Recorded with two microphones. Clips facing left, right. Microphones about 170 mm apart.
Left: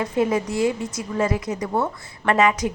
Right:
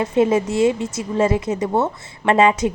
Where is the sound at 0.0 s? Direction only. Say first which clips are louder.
Right 5 dB; 25° right (ahead or behind).